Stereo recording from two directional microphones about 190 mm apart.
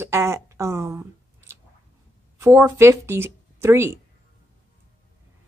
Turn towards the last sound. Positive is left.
turn(degrees=-15)  # may be behind; listen again after turning